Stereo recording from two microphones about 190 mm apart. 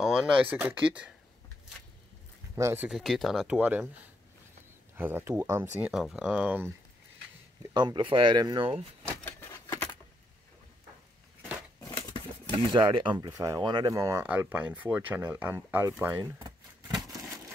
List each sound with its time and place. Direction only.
0.0 s speech: 5° right (ahead or behind)
2.5 s speech: 15° right (ahead or behind)
4.9 s speech: 10° right (ahead or behind)
7.7 s speech: 25° right (ahead or behind)
9.2 s a sound: 15° left (ahead or behind)
12.7 s speech: 25° right (ahead or behind)